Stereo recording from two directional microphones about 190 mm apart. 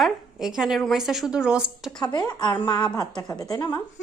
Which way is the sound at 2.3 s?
25° left (ahead or behind).